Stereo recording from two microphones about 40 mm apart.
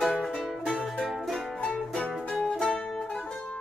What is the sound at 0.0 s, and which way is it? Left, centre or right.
Music, centre.